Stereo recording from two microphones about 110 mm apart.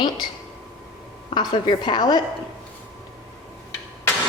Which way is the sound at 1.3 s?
45° left (ahead or behind).